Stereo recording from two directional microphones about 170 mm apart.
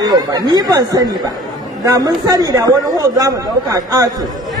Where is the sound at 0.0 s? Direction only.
25° right (ahead or behind).